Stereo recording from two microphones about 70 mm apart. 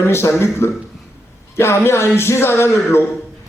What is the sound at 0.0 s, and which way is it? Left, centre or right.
A man's voice, left.